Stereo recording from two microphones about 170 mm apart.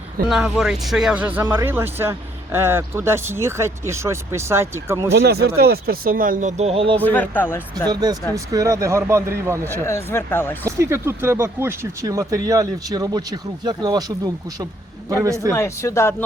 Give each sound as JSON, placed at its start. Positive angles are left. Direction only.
{"t": 0.3, "sound": "speech", "side_deg": 0}
{"t": 5.1, "sound": "speech", "side_deg": -75}
{"t": 7.0, "sound": "speech", "side_deg": 10}
{"t": 7.9, "sound": "speech", "side_deg": -25}
{"t": 9.8, "sound": "speech", "side_deg": 15}
{"t": 10.7, "sound": "speech", "side_deg": -15}
{"t": 15.1, "sound": "speech", "side_deg": -20}
{"t": 15.5, "sound": "speech", "side_deg": 15}